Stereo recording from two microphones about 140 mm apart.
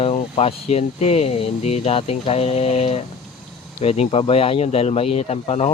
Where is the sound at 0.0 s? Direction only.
45° left (ahead or behind).